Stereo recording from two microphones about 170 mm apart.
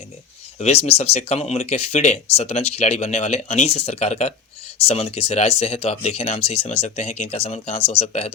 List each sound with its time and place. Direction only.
0.6 s speech: 35° left (ahead or behind)